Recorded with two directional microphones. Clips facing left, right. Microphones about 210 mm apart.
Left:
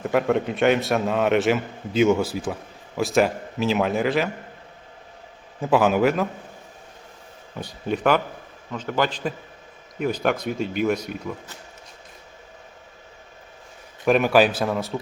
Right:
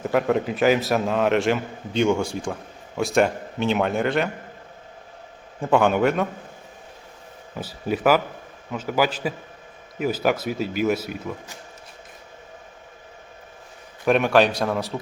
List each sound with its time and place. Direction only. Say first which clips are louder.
0.0 s a man's voice: even; centre (ahead or behind)
5.5 s a man's voice: even; 5° left (ahead or behind)
7.6 s a man's voice: right 1 dB; 5° right (ahead or behind)
14.0 s a man's voice: even; centre (ahead or behind)